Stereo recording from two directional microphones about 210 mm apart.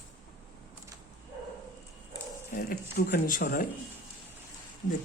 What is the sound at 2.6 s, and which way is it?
Speech, 45° left (ahead or behind).